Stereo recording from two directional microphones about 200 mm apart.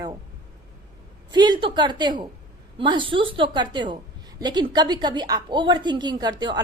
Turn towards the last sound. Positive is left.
turn(degrees=-20)  # may be behind; listen again after turning